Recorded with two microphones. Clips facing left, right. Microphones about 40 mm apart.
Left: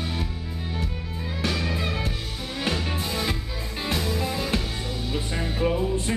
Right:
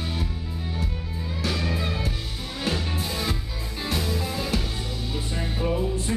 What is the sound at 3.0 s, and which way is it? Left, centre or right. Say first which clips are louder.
Music: left 1 dB; centre.